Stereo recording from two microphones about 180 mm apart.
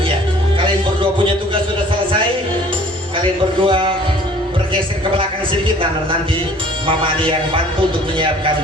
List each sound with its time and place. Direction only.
3.6 s a man's voice: 30° right (ahead or behind)
6.8 s a man's voice: 30° right (ahead or behind)